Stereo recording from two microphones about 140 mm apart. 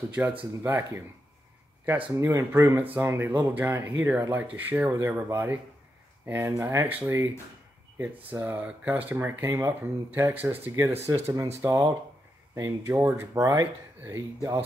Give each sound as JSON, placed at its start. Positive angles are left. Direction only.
{"t": 0.1, "sound": "speech", "side_deg": -10}
{"t": 8.3, "sound": "speech", "side_deg": -15}
{"t": 11.1, "sound": "speech", "side_deg": -25}